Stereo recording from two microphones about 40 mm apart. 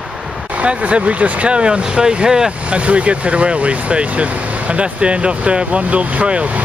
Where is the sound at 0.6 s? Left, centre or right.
Right.